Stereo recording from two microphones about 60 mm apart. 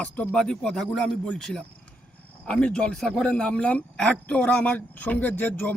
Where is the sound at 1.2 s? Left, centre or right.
Centre.